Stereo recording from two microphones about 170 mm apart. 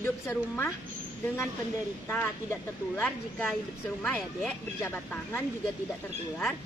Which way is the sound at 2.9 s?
5° left (ahead or behind).